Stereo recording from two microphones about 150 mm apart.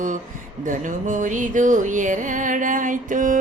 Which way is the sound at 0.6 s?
60° right (ahead or behind).